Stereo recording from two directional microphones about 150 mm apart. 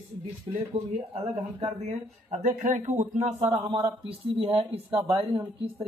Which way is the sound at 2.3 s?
55° right (ahead or behind).